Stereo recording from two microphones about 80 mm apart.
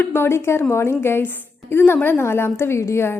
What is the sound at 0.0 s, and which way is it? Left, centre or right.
A woman's voice, left.